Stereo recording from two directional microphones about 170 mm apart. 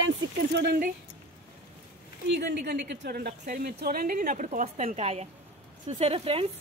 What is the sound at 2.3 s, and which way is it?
A woman's voice, 80° right.